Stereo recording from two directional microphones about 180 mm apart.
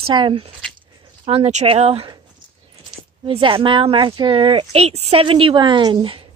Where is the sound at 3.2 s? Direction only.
30° right (ahead or behind).